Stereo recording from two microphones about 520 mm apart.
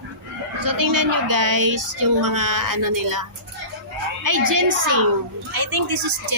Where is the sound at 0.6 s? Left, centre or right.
Right.